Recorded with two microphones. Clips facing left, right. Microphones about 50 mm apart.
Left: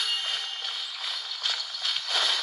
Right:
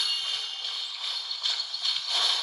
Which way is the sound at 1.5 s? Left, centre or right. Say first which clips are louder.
Left 1 dB; left.